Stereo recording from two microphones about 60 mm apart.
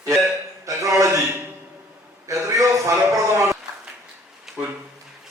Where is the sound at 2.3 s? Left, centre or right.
Right.